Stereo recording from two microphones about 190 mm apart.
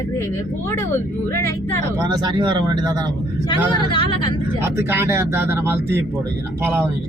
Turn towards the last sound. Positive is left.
turn(degrees=-15)  # may be behind; listen again after turning